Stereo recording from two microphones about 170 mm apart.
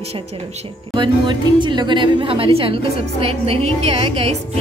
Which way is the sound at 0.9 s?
30° right (ahead or behind).